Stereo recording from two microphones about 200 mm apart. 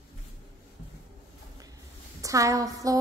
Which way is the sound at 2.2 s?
15° right (ahead or behind).